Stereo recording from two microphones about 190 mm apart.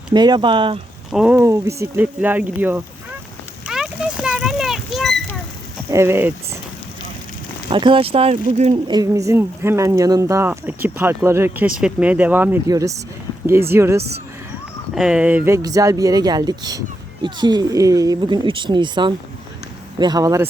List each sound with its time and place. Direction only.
0.1 s speech: 20° right (ahead or behind)
1.1 s speech: 5° right (ahead or behind)
3.7 s a sound: 5° right (ahead or behind)
5.9 s speech: 15° right (ahead or behind)
7.7 s speech: 25° right (ahead or behind)
8.7 s speech: 20° right (ahead or behind)